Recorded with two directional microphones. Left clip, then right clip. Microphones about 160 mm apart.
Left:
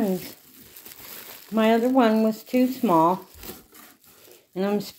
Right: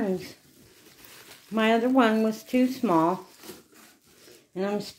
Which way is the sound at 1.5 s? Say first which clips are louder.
Left 2 dB; 5° left (ahead or behind).